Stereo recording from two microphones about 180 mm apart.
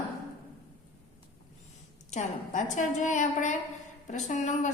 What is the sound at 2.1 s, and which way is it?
A woman's voice, 40° left (ahead or behind).